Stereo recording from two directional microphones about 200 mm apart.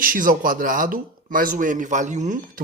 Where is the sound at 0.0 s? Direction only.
45° right (ahead or behind).